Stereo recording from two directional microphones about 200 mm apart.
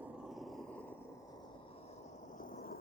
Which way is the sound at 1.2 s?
20° left (ahead or behind).